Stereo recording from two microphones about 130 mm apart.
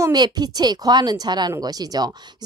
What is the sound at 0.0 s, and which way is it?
Speech, 30° right (ahead or behind).